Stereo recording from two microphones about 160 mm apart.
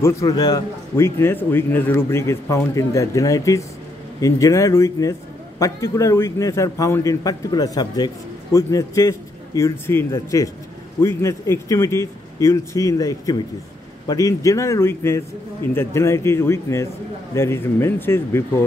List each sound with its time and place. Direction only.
0.0 s a man's voice: 20° left (ahead or behind)